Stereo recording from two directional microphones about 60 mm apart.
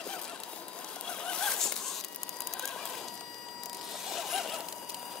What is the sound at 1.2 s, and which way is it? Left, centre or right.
Zipper, centre.